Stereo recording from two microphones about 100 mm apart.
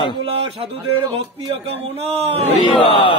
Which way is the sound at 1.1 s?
80° right.